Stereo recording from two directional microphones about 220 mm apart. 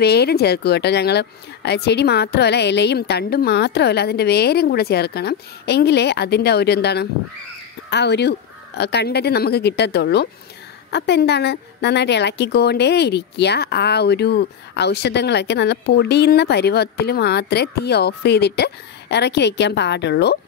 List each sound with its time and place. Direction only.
0.0 s speech: 45° left (ahead or behind)